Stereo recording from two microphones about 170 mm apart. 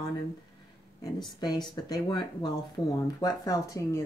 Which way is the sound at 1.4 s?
25° left (ahead or behind).